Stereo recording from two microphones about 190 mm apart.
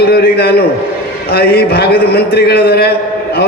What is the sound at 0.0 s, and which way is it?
A man's voice, 55° left (ahead or behind).